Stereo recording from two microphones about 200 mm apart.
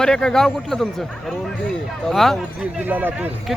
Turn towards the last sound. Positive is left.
turn(degrees=-10)  # may be behind; listen again after turning